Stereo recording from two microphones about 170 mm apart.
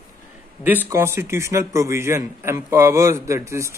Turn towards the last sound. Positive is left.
turn(degrees=-15)  # may be behind; listen again after turning